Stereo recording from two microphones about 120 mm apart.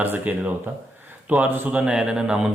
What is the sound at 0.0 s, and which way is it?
Speech, 15° right (ahead or behind).